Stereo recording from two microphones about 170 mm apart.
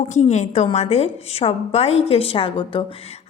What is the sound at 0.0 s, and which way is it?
A woman's voice, 40° left (ahead or behind).